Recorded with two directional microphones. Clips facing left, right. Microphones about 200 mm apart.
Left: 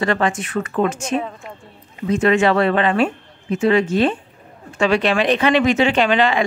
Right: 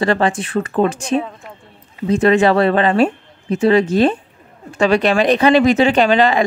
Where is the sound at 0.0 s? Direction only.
35° right (ahead or behind).